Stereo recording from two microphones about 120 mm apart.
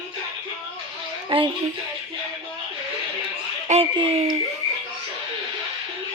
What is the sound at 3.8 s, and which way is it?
Speech, 50° right (ahead or behind).